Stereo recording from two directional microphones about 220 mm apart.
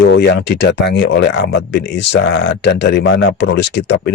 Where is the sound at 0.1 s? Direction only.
50° left (ahead or behind).